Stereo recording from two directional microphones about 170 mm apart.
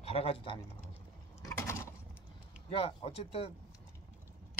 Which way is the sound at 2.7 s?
35° left (ahead or behind).